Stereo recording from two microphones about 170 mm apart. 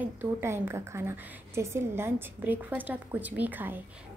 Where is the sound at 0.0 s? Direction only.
15° right (ahead or behind).